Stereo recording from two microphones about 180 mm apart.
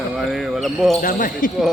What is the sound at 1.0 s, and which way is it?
Speech, 50° left (ahead or behind).